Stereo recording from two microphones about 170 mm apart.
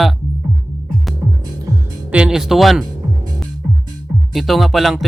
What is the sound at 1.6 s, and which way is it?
Music, 15° right (ahead or behind).